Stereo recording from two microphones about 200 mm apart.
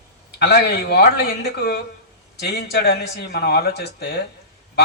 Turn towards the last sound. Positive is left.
turn(degrees=55)  # may be behind; listen again after turning